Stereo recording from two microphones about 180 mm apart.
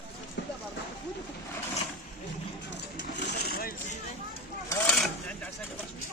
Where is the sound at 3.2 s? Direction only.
60° left (ahead or behind).